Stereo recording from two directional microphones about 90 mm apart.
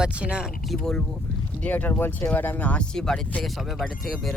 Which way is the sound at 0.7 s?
5° left (ahead or behind).